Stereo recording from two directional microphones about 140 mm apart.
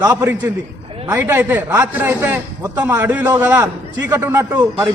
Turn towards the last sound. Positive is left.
turn(degrees=-15)  # may be behind; listen again after turning